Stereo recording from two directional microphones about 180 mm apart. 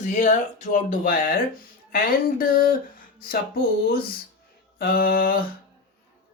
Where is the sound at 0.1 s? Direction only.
45° left (ahead or behind).